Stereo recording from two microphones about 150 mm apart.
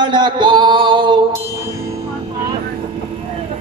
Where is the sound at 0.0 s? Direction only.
30° right (ahead or behind).